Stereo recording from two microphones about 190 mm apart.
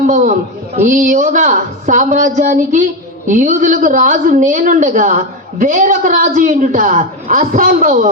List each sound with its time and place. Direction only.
0.8 s a woman's voice: 40° right (ahead or behind)